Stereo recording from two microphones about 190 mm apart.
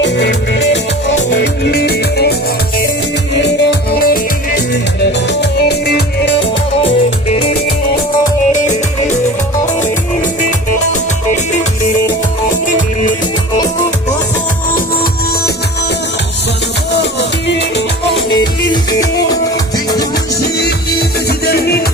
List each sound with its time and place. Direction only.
0.0 s music: 65° left (ahead or behind)
3.4 s music: 60° left (ahead or behind)
16.9 s music: 60° left (ahead or behind)
18.3 s music: 20° left (ahead or behind)
21.2 s music: 55° left (ahead or behind)